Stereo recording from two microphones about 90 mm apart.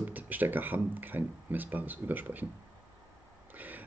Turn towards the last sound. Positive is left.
turn(degrees=-20)  # may be behind; listen again after turning